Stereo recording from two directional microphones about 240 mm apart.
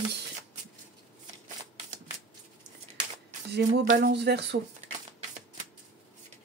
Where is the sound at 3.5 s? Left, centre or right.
Right.